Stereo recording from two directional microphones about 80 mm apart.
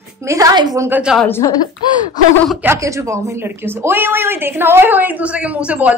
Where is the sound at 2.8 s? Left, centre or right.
Right.